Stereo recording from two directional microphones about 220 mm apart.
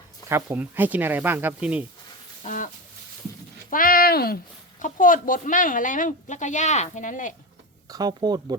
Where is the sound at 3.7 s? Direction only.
40° left (ahead or behind).